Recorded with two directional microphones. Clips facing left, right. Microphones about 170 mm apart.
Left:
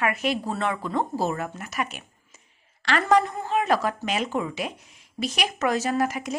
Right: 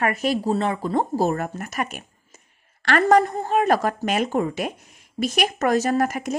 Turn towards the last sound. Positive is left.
turn(degrees=-50)  # may be behind; listen again after turning